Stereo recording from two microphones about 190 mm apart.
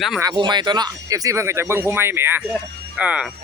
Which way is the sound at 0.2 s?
20° right (ahead or behind).